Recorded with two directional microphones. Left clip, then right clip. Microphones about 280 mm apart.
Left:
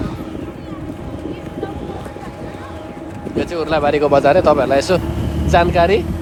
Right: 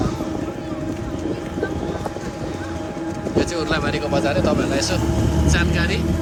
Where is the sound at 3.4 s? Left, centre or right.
Centre.